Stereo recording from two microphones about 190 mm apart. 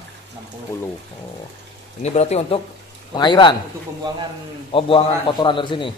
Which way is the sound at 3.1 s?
25° left (ahead or behind).